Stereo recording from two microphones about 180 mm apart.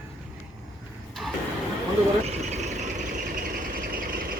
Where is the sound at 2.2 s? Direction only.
40° right (ahead or behind).